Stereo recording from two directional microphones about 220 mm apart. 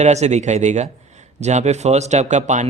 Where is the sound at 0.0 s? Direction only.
30° right (ahead or behind).